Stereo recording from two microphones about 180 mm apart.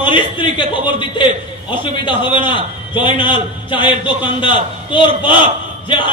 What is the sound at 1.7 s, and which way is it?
A man's voice, 25° left (ahead or behind).